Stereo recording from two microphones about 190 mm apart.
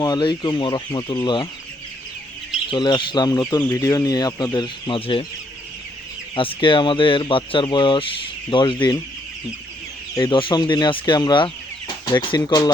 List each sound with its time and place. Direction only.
0.0 s speech: 20° left (ahead or behind)
2.6 s speech: 25° left (ahead or behind)
6.3 s speech: 25° left (ahead or behind)
10.2 s speech: 25° left (ahead or behind)